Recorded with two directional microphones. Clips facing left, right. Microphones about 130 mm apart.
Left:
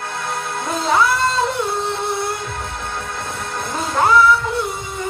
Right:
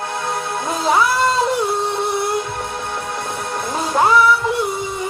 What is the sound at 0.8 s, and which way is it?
Music, 25° right (ahead or behind).